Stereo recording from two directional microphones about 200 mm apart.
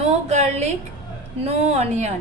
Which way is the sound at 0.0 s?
35° right (ahead or behind).